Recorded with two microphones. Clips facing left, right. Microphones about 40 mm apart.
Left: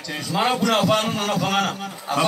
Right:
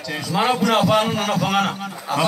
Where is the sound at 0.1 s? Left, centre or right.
Centre.